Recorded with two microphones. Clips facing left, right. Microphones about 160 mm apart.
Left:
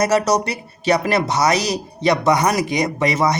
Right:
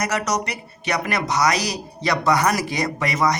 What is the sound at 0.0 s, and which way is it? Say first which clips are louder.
Speech: left 7 dB; 30° left (ahead or behind).